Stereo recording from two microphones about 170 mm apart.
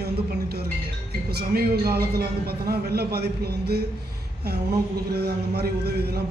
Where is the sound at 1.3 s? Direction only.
65° right (ahead or behind).